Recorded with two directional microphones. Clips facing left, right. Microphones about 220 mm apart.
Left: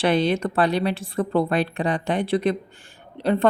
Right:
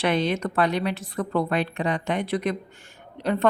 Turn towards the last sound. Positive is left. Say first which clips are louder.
# left 3 dB
turn(degrees=30)  # may be behind; listen again after turning